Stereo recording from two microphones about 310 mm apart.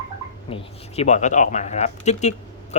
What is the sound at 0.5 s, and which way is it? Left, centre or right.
Speech, left.